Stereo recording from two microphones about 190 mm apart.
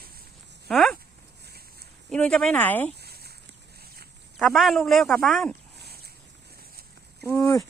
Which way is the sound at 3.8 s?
55° right (ahead or behind).